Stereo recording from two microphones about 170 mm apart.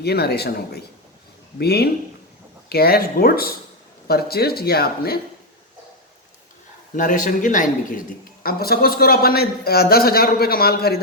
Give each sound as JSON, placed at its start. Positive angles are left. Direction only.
{"t": 0.0, "sound": "a man's voice", "side_deg": 70}
{"t": 6.9, "sound": "a man's voice", "side_deg": 50}
{"t": 8.4, "sound": "a man's voice", "side_deg": 65}